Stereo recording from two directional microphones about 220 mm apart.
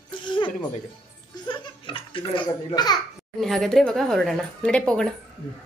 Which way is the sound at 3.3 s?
Centre (ahead or behind).